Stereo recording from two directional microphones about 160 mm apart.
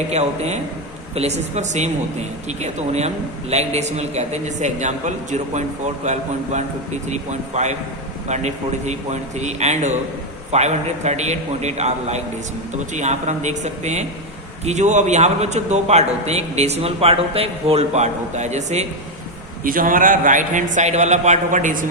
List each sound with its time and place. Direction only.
0.1 s a man's voice: 45° right (ahead or behind)
19.6 s a man's voice: 60° right (ahead or behind)